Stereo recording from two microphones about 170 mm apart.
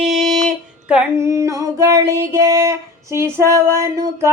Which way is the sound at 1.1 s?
15° right (ahead or behind).